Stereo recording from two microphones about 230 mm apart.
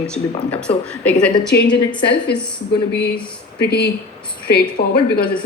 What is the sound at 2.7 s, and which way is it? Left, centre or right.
Speech, left.